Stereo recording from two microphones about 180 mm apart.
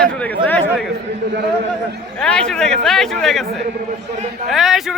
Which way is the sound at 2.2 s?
5° left (ahead or behind).